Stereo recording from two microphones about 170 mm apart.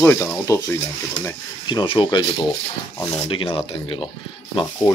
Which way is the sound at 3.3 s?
30° left (ahead or behind).